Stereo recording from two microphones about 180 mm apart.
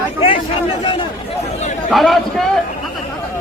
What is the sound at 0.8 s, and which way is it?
Speech, 25° left (ahead or behind).